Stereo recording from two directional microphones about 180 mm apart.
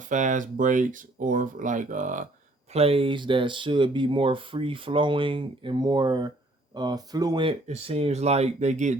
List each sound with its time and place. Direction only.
0.0 s speech: 45° right (ahead or behind)
2.7 s speech: 30° right (ahead or behind)